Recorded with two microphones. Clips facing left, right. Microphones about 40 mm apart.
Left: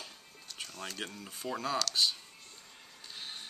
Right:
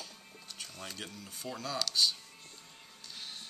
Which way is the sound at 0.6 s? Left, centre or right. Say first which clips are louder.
Left 3 dB; centre.